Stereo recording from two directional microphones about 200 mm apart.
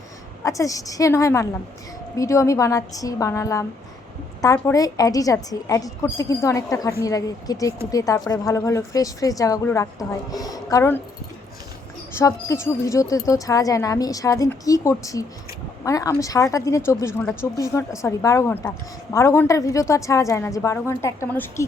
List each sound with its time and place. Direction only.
0.4 s a woman's voice: 15° left (ahead or behind)
12.1 s a woman's voice: 15° left (ahead or behind)